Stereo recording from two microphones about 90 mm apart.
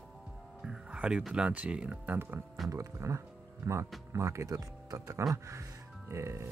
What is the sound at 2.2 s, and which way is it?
Speech, 25° right (ahead or behind).